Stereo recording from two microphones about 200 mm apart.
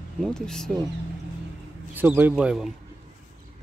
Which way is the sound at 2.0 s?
10° right (ahead or behind).